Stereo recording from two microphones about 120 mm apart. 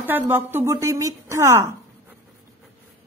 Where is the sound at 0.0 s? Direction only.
15° right (ahead or behind).